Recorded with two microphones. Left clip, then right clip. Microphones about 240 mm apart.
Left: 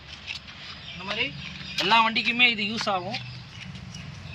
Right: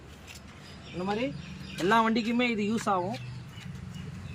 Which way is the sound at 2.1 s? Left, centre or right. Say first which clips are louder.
Left 8 dB; centre.